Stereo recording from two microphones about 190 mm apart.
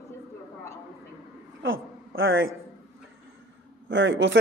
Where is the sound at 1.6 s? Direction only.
85° right.